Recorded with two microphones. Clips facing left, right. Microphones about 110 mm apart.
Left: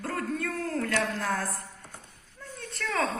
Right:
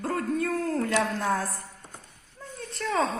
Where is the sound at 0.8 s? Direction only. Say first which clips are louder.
Right 3 dB; 30° right (ahead or behind).